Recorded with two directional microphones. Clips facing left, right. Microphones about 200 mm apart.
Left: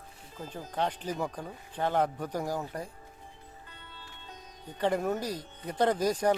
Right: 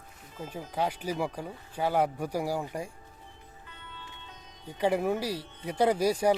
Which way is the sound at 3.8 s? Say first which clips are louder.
Right 3 dB; 35° left (ahead or behind).